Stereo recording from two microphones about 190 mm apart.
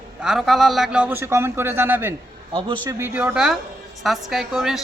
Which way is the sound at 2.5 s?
25° right (ahead or behind).